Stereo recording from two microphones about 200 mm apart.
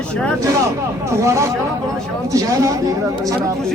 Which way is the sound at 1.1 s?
15° right (ahead or behind).